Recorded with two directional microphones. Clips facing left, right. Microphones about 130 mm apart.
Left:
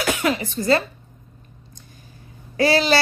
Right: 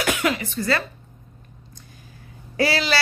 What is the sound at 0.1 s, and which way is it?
Speech, 30° left (ahead or behind).